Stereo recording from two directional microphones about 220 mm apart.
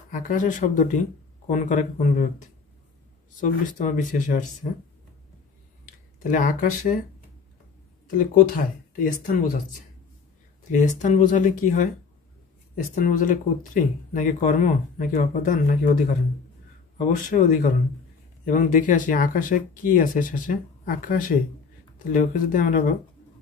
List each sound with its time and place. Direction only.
0.1 s speech: 35° left (ahead or behind)
6.1 s speech: 40° left (ahead or behind)
8.2 s speech: 35° left (ahead or behind)
17.1 s speech: 35° left (ahead or behind)